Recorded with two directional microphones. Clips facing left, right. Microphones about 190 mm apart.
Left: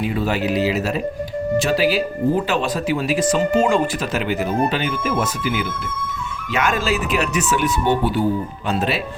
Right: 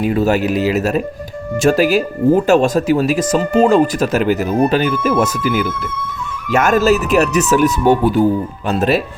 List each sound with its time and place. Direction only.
0.0 s speech: 45° right (ahead or behind)